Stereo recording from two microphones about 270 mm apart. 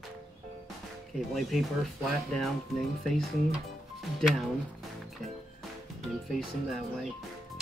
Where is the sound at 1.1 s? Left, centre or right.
Centre.